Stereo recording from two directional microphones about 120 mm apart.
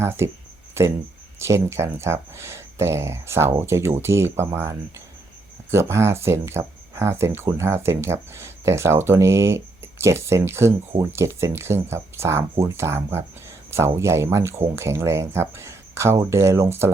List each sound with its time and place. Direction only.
0.0 s speech: 20° right (ahead or behind)